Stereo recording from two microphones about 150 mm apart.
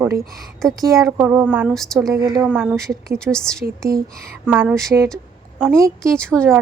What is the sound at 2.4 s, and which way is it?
Speech, 5° right (ahead or behind).